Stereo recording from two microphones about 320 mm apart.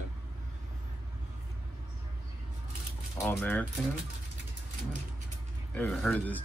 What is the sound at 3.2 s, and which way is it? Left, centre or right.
Speech, centre.